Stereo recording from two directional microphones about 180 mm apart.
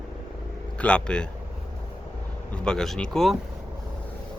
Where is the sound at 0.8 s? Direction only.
5° left (ahead or behind).